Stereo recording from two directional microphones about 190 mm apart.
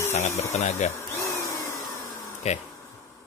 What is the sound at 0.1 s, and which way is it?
Speech, 35° left (ahead or behind).